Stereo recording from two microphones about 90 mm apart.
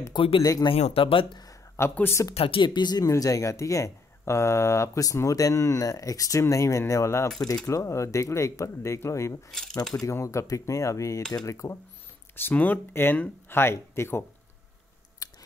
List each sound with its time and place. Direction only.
0.1 s speech: 75° left (ahead or behind)
0.4 s speech: 45° left (ahead or behind)
0.7 s speech: 90° left
1.3 s a sound: 45° left (ahead or behind)
2.3 s speech: 80° left; by 3.1 s 50° left (ahead or behind)
3.1 s speech: 40° left (ahead or behind)
9.5 s speech: 5° left (ahead or behind)
9.9 s speech: 35° left (ahead or behind)
12.4 s speech: 20° left (ahead or behind)